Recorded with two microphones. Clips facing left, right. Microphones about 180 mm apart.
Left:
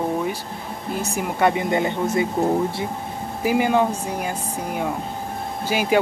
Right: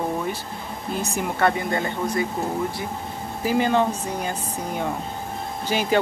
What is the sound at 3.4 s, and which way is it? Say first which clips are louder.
Speech: left 2 dB; 10° left (ahead or behind).